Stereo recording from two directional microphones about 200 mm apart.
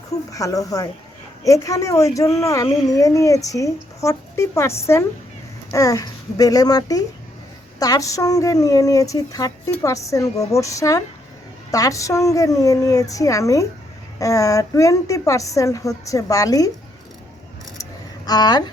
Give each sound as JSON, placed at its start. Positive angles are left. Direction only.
{"t": 0.1, "sound": "speech", "side_deg": 15}
{"t": 18.3, "sound": "speech", "side_deg": 20}